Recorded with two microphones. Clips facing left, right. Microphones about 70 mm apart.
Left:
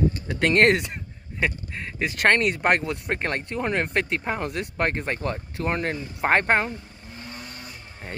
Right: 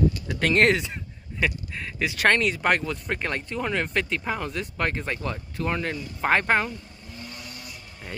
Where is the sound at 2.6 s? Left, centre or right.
Left.